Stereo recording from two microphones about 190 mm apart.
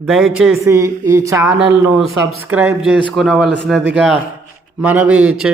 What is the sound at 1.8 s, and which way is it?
A man's voice, 5° right (ahead or behind).